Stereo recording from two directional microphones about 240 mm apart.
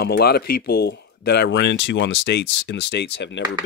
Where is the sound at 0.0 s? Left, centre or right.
Left.